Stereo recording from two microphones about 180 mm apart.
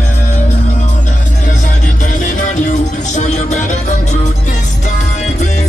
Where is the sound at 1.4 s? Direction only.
45° left (ahead or behind).